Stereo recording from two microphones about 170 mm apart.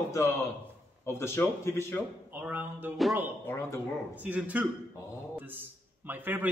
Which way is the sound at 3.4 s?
15° left (ahead or behind).